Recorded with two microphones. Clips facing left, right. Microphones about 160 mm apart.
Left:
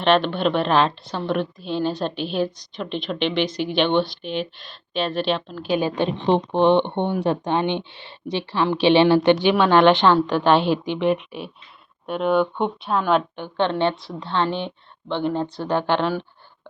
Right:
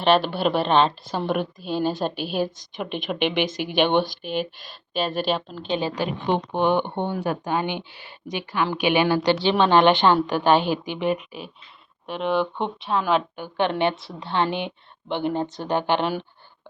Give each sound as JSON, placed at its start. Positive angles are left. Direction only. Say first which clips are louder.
{"t": 0.0, "sound": "a woman's voice", "louder": "left 1 dB", "side_deg": -5}
{"t": 5.6, "sound": "speech", "louder": "left 4 dB", "side_deg": 10}
{"t": 6.0, "sound": "a woman's voice", "louder": "left 4 dB", "side_deg": 30}
{"t": 9.3, "sound": "speech", "louder": "left 3 dB", "side_deg": 15}
{"t": 9.6, "sound": "a woman's voice", "louder": "left 2 dB", "side_deg": -10}